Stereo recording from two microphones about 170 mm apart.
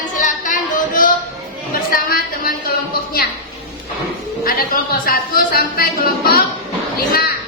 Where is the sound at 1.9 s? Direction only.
60° left (ahead or behind).